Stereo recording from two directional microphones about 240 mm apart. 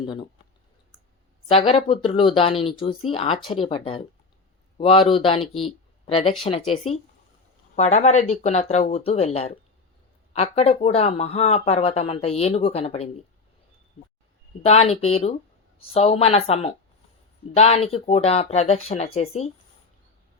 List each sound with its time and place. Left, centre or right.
0.0 s speech: centre
1.5 s speech: left
5.6 s a sound: left
7.8 s speech: left
14.6 s speech: left